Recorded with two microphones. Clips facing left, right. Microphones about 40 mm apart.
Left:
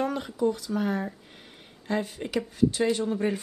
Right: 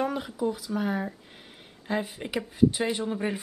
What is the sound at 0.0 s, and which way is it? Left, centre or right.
Speech, centre.